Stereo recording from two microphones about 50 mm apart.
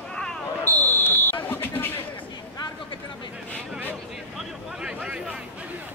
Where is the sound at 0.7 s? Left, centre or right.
Left.